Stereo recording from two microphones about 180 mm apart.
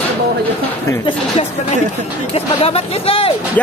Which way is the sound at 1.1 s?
35° left (ahead or behind).